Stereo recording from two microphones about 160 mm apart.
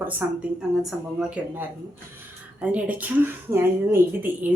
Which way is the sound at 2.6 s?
10° right (ahead or behind).